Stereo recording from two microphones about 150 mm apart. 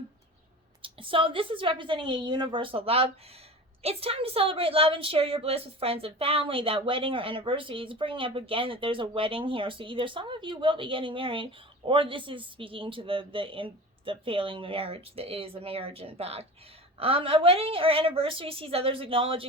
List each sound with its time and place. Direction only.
0.8 s a woman's voice: 35° right (ahead or behind)